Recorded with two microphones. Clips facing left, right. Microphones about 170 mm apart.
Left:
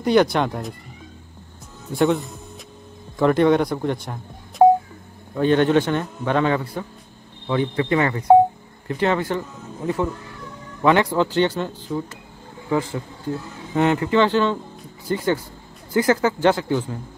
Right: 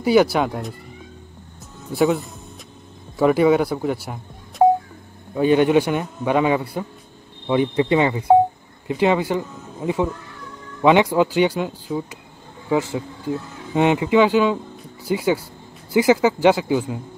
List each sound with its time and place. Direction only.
0.0 s speech: 5° right (ahead or behind)
1.9 s a man's voice: 5° right (ahead or behind)
10.8 s a man's voice: 15° right (ahead or behind)
13.7 s a man's voice: 15° right (ahead or behind)